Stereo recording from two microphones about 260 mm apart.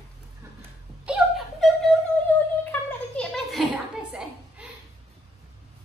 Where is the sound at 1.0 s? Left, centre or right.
Centre.